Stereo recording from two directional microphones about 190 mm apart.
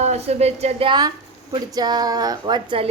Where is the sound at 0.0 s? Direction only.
35° right (ahead or behind).